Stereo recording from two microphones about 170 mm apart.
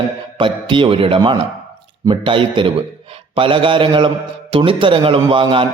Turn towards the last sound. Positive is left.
turn(degrees=-30)  # may be behind; listen again after turning